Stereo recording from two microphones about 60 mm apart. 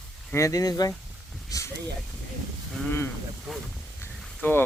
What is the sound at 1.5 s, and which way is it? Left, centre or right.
Speech, left.